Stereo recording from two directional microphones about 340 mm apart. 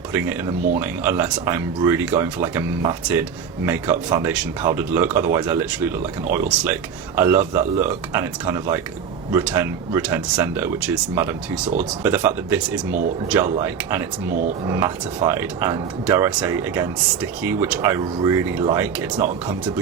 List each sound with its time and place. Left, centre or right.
0.1 s speech: centre